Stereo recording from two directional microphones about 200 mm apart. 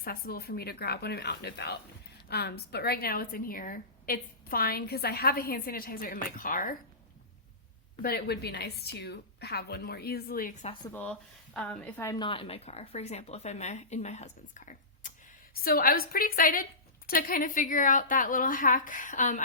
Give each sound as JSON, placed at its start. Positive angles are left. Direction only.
{"t": 0.0, "sound": "a woman's voice", "side_deg": 50}
{"t": 8.0, "sound": "a woman's voice", "side_deg": 55}
{"t": 10.9, "sound": "a woman's voice", "side_deg": 5}